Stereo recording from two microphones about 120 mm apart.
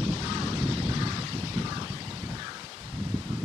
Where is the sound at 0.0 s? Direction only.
25° right (ahead or behind).